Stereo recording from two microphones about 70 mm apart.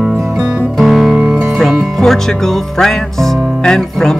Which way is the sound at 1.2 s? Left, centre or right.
Centre.